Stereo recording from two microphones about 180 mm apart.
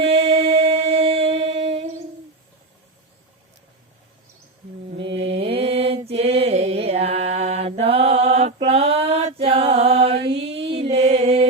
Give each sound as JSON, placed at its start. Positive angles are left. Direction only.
{"t": 0.0, "sound": "music", "side_deg": -35}
{"t": 5.0, "sound": "mantra", "side_deg": -35}
{"t": 10.2, "sound": "mantra", "side_deg": -80}
{"t": 10.4, "sound": "music", "side_deg": -35}